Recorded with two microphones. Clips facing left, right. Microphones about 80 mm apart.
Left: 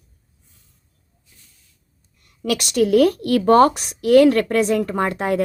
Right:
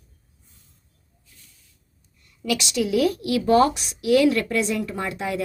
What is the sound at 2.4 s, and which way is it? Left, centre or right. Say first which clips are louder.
Speech: left 5 dB; left.